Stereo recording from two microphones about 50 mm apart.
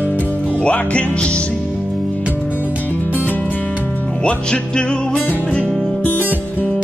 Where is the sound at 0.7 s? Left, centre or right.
Left.